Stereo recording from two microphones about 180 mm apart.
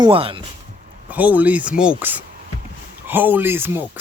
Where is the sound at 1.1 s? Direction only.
10° right (ahead or behind).